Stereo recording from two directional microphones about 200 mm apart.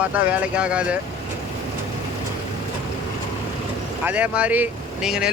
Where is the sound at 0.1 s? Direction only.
5° right (ahead or behind).